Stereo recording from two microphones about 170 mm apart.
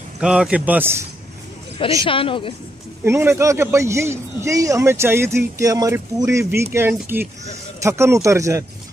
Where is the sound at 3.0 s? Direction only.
15° right (ahead or behind).